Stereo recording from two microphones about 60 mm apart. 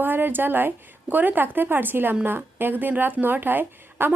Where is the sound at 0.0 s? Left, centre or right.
Right.